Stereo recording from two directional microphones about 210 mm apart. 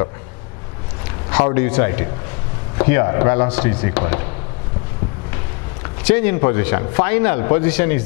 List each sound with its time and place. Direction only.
1.5 s speech: 15° left (ahead or behind)
6.0 s speech: 10° left (ahead or behind)